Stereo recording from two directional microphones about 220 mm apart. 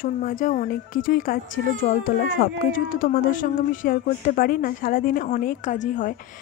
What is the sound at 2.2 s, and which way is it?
Speech, 55° left (ahead or behind).